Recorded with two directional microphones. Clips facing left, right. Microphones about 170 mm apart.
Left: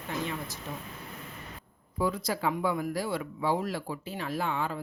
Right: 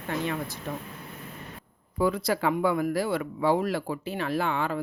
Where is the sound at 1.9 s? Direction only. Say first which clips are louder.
Right 5 dB; 65° right (ahead or behind).